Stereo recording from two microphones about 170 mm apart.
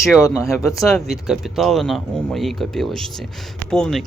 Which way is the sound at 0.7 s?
Centre (ahead or behind).